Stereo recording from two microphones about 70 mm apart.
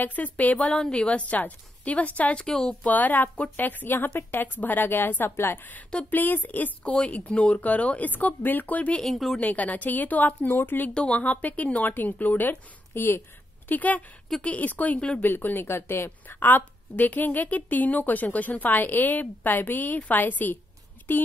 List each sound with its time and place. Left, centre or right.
0.0 s a woman's voice: left
2.8 s a woman's voice: left
9.0 s a woman's voice: centre
9.4 s a woman's voice: left
10.9 s a woman's voice: centre